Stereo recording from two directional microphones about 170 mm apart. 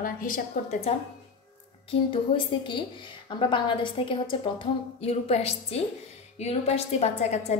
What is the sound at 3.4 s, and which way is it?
A woman's voice, 30° left (ahead or behind).